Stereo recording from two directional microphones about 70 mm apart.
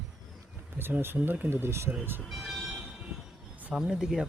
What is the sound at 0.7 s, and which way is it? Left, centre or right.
Speech, right.